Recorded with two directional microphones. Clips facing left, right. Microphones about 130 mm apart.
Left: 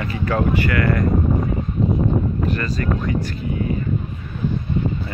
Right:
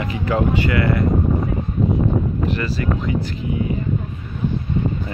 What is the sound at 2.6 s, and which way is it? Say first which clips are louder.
Speech: even; 15° right (ahead or behind).